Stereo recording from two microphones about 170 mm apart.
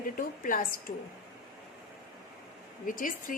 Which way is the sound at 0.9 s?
60° left (ahead or behind).